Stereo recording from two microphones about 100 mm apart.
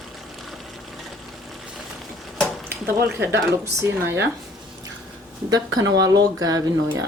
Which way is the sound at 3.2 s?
25° right (ahead or behind).